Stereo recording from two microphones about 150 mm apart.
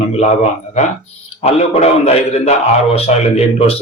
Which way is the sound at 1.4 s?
45° left (ahead or behind).